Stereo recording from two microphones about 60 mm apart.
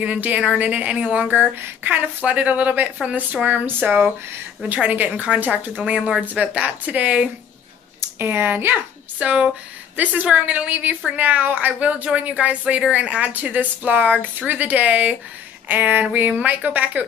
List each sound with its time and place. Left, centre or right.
0.0 s speech: right
1.5 s speech: right
2.2 s speech: right
8.2 s speech: right
9.2 s speech: right